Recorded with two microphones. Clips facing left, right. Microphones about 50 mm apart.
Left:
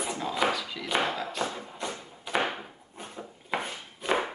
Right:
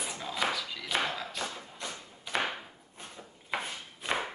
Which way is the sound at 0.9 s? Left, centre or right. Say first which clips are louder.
Left 4 dB; centre.